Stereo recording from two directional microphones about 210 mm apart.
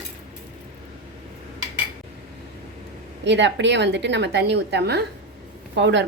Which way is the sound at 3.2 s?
55° right (ahead or behind).